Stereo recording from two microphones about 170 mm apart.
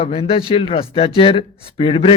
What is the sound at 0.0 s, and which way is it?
Speech, 35° left (ahead or behind).